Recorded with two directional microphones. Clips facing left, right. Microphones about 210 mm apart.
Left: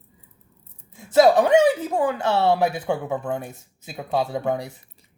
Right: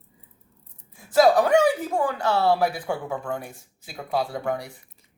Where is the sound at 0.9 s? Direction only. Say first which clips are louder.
Left 2 dB; 20° left (ahead or behind).